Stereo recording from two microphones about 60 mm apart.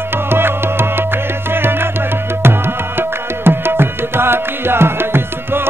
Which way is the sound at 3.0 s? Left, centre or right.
Right.